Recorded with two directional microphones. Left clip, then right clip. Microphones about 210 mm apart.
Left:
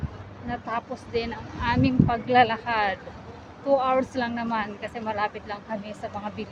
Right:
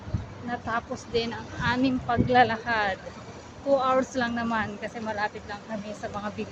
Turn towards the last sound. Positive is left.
turn(degrees=0)  # may be behind; listen again after turning